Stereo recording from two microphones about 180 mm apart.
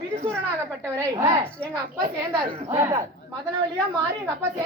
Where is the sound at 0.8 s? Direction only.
15° right (ahead or behind).